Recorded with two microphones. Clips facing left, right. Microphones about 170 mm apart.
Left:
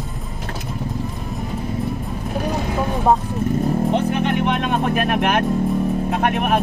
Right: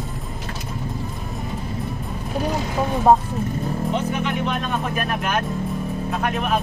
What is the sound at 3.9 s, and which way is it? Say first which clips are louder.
Music: left 4 dB; 60° left (ahead or behind).